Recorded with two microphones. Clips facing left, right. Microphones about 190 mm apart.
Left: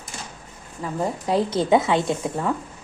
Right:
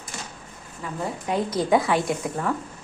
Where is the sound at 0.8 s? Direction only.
40° left (ahead or behind).